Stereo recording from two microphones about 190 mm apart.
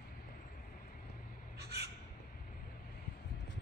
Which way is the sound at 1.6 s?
60° right (ahead or behind).